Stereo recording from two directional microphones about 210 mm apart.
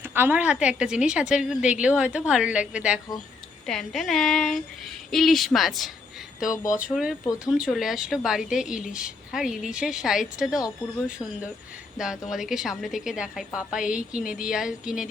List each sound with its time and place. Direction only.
0.0 s speech: 10° right (ahead or behind)
6.7 s speech: 40° left (ahead or behind)
6.9 s speech: centre (ahead or behind)
11.9 s speech: centre (ahead or behind)